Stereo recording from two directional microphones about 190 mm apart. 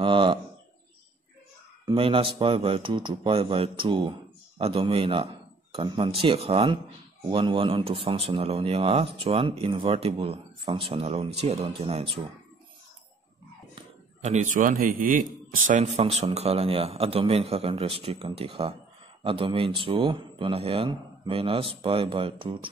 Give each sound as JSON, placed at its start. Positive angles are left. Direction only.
{"t": 0.0, "sound": "speech", "side_deg": -25}
{"t": 1.9, "sound": "a man's voice", "side_deg": -30}
{"t": 14.2, "sound": "a man's voice", "side_deg": -40}
{"t": 15.7, "sound": "a man's voice", "side_deg": -35}